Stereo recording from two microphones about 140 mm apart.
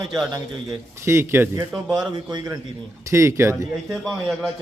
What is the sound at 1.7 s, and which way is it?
Speech, 5° right (ahead or behind).